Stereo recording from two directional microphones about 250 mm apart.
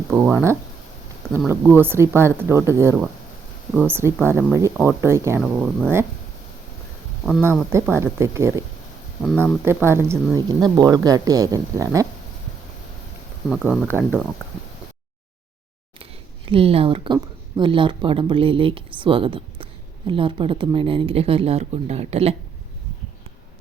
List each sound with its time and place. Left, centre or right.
0.1 s a woman's voice: centre
5.4 s speech: centre
7.3 s a woman's voice: centre
9.2 s speech: centre
9.6 s a woman's voice: centre
13.5 s speech: centre
16.5 s speech: right